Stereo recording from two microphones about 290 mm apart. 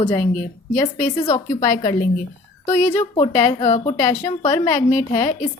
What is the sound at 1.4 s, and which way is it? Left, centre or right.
Speech, centre.